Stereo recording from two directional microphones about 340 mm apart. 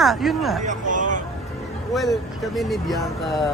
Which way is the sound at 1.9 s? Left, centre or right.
Centre.